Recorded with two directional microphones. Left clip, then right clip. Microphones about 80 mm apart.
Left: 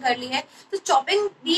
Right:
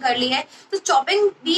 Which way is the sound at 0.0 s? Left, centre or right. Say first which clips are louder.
Right 4 dB; right.